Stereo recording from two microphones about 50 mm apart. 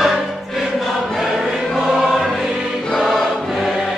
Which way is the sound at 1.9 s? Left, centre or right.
Centre.